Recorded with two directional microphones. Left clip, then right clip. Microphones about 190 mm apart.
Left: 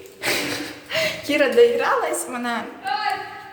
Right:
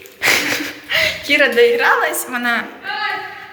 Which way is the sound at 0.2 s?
25° right (ahead or behind).